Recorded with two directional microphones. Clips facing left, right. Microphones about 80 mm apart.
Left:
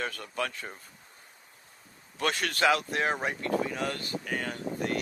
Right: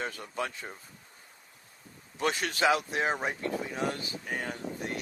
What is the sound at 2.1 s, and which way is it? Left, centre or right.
Speech, left.